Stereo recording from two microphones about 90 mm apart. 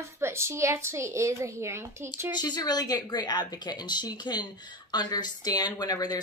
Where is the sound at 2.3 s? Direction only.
50° left (ahead or behind).